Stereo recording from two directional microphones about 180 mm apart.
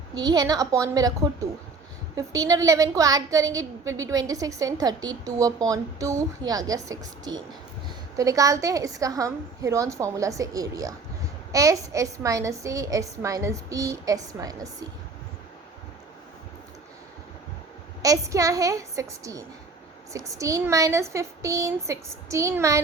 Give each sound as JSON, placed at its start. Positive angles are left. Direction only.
{"t": 0.1, "sound": "a woman's voice", "side_deg": -20}
{"t": 2.1, "sound": "a woman's voice", "side_deg": -20}
{"t": 18.0, "sound": "a woman's voice", "side_deg": -20}